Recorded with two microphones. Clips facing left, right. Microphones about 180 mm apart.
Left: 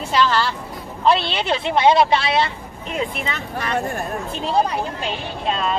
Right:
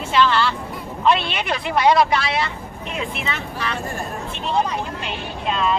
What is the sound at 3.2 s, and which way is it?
Speech, 40° left (ahead or behind).